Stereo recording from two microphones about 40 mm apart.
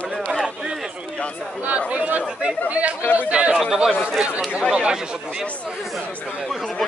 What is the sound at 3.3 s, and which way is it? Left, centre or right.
Speech, right.